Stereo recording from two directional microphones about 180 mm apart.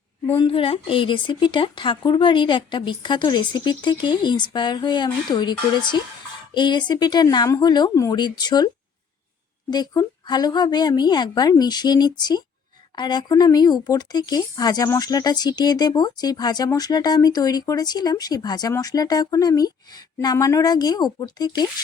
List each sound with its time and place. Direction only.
0.3 s speech: 30° left (ahead or behind)